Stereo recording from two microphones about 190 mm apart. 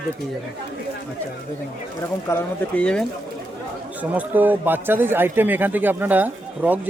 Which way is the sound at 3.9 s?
10° right (ahead or behind).